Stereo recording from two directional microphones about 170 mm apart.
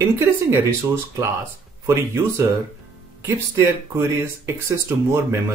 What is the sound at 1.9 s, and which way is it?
Speech, 15° right (ahead or behind).